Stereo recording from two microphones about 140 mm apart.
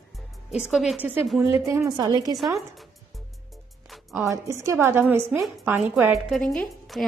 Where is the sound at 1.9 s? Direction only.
30° right (ahead or behind).